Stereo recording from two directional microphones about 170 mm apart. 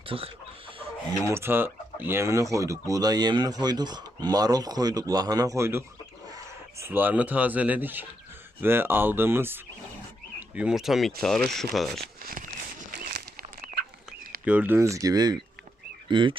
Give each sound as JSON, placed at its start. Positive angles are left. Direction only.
{"t": 0.0, "sound": "speech", "side_deg": -30}
{"t": 1.2, "sound": "speech", "side_deg": -15}
{"t": 11.9, "sound": "a sound", "side_deg": -55}
{"t": 14.4, "sound": "speech", "side_deg": -10}